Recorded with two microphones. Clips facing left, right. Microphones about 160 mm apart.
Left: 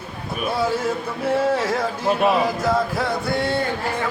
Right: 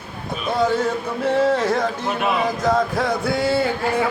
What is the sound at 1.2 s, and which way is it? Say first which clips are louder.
Speech: right 2 dB; 5° left (ahead or behind).